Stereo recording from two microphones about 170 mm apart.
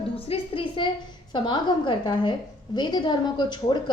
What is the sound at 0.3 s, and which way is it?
A woman's voice, 30° left (ahead or behind).